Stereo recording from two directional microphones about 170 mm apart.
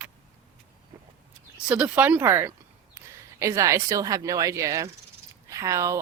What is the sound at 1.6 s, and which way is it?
Speech, 5° right (ahead or behind).